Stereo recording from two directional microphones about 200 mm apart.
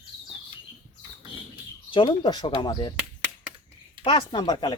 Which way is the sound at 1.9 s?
25° left (ahead or behind).